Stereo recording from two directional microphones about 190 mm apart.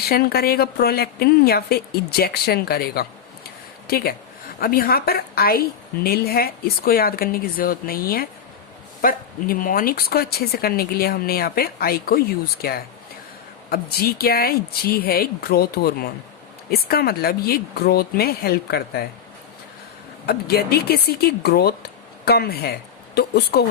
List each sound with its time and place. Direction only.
0.1 s a woman's voice: 55° left (ahead or behind)
20.2 s speech: 55° left (ahead or behind)